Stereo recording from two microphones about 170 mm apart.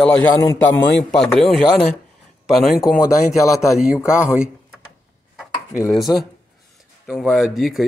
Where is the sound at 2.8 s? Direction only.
55° left (ahead or behind).